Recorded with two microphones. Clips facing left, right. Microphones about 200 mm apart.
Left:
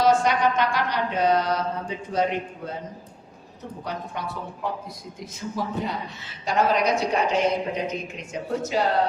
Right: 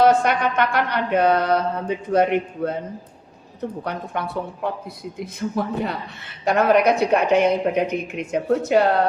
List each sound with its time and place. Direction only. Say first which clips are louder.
0.0 s a woman's voice: right 3 dB; 60° right (ahead or behind)
3.8 s a woman's voice: right 4 dB; 60° right (ahead or behind)